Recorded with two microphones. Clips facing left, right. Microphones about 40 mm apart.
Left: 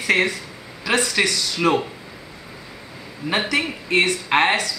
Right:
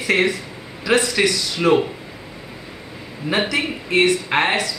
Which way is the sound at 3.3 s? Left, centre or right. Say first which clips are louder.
Right 1 dB; centre.